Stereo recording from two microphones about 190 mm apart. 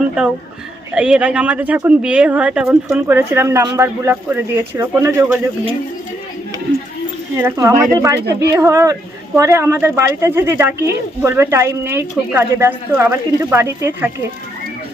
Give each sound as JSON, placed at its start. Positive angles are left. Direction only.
{"t": 0.9, "sound": "a woman's voice", "side_deg": -5}
{"t": 7.4, "sound": "a woman's voice", "side_deg": -15}